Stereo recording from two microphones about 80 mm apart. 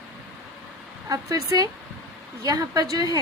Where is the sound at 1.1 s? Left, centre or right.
Right.